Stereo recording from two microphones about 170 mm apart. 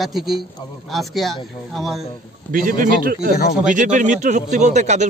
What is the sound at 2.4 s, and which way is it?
Speech, 55° right (ahead or behind).